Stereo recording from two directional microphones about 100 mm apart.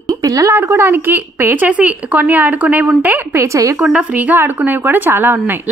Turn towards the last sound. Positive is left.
turn(degrees=-20)  # may be behind; listen again after turning